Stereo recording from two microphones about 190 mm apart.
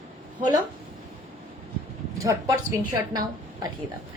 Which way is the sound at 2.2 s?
15° right (ahead or behind).